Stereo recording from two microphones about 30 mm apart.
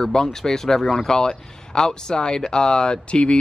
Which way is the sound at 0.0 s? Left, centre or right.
Centre.